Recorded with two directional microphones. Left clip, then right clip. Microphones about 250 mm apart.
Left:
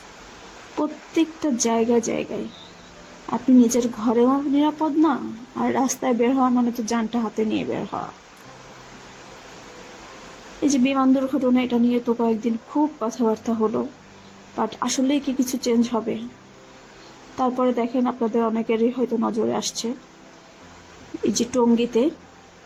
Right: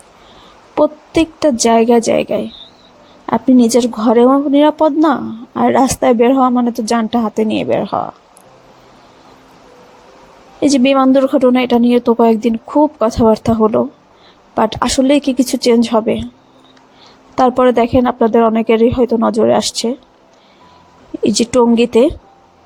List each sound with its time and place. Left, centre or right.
0.8 s speech: right
3.2 s speech: right
10.6 s speech: right
17.3 s speech: right
21.2 s speech: right